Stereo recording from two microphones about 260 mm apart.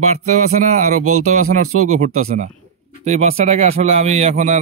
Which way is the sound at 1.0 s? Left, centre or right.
Right.